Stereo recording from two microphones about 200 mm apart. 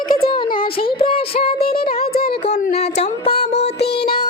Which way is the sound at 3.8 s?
55° left (ahead or behind).